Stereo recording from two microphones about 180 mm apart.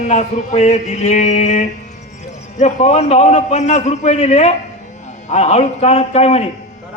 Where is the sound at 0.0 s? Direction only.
40° left (ahead or behind).